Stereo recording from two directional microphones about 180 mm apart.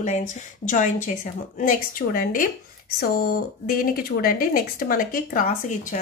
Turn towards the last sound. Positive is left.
turn(degrees=50)  # may be behind; listen again after turning